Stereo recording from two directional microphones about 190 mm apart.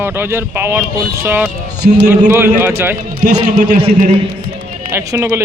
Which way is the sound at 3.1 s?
55° right (ahead or behind).